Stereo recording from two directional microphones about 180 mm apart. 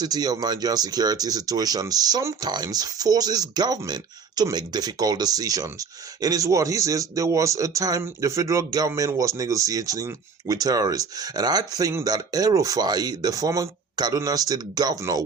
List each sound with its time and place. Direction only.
0.0 s speech: 20° right (ahead or behind)